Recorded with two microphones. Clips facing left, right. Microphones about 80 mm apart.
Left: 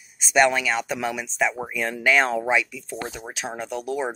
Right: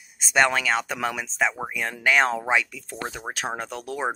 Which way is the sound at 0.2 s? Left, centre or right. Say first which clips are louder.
Left 2 dB; right.